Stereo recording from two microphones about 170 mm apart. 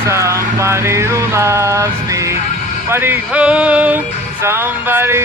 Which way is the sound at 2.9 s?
10° right (ahead or behind).